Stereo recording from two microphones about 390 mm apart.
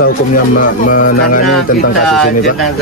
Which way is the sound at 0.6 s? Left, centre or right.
Left.